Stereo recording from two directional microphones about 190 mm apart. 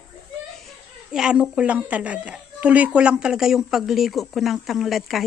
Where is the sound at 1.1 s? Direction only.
5° right (ahead or behind).